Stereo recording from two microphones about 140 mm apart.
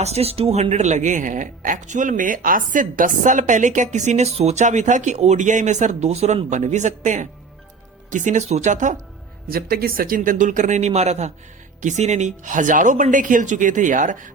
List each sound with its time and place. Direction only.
0.0 s speech: 50° right (ahead or behind); by 9.0 s 65° right (ahead or behind)
9.5 s speech: 90° right; by 14.3 s 65° right (ahead or behind)